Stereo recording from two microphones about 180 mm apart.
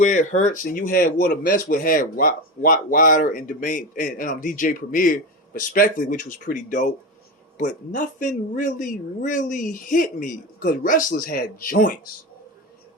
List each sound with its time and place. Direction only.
0.0 s speech: 45° left (ahead or behind)